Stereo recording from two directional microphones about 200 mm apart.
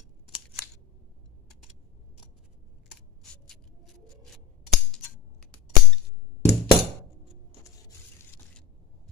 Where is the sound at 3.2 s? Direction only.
5° left (ahead or behind).